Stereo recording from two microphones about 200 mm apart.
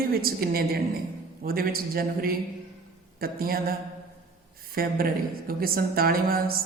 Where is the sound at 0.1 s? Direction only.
50° right (ahead or behind).